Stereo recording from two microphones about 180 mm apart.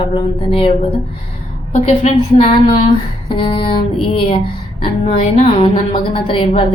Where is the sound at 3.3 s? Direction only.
30° left (ahead or behind).